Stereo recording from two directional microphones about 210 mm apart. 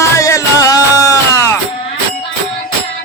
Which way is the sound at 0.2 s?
15° left (ahead or behind).